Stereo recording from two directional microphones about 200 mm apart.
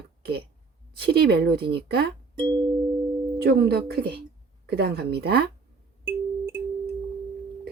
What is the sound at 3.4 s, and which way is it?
Speech, 55° right (ahead or behind).